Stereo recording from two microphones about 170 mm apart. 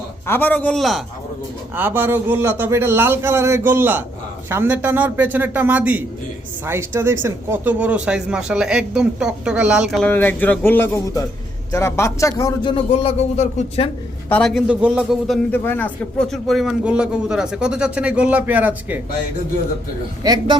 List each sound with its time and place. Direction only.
0.3 s speech: 10° left (ahead or behind)
1.7 s a man's voice: 10° right (ahead or behind)
10.1 s speech: 10° left (ahead or behind)
12.7 s speech: 35° left (ahead or behind)
14.3 s a man's voice: 10° left (ahead or behind)
14.5 s a man's voice: 5° right (ahead or behind)
15.5 s speech: 10° left (ahead or behind); by 18.9 s 10° right (ahead or behind)
20.2 s speech: 20° right (ahead or behind)